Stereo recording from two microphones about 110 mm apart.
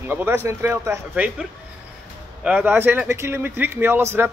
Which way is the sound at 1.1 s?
10° right (ahead or behind).